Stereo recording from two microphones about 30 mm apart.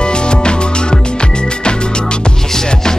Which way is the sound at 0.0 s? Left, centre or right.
Left.